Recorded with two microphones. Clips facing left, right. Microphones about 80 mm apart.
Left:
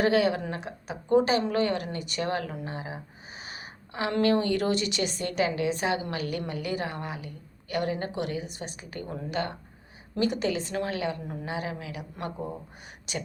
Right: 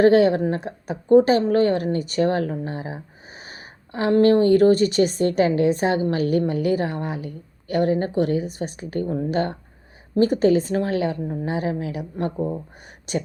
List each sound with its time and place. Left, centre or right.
0.0 s a woman's voice: right